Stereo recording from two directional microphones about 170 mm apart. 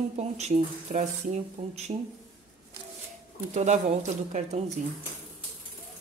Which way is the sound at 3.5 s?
45° right (ahead or behind).